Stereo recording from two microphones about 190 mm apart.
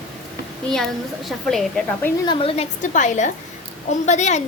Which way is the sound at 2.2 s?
25° left (ahead or behind).